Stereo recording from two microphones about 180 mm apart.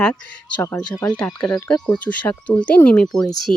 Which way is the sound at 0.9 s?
20° left (ahead or behind).